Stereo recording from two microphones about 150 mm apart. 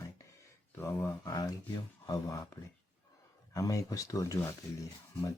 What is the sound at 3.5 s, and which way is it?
Speech, 20° left (ahead or behind).